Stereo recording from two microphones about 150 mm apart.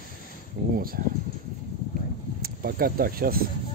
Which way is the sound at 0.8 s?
75° right (ahead or behind).